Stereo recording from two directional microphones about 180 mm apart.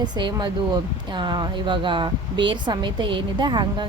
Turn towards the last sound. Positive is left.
turn(degrees=-25)  # may be behind; listen again after turning